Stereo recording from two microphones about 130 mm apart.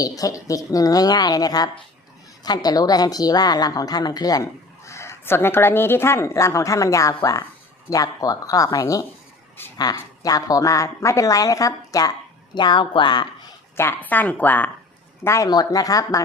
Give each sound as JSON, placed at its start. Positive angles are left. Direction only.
{"t": 0.0, "sound": "a woman's voice", "side_deg": 25}
{"t": 12.5, "sound": "speech", "side_deg": 40}
{"t": 13.7, "sound": "a woman's voice", "side_deg": 15}
{"t": 15.2, "sound": "a woman's voice", "side_deg": 25}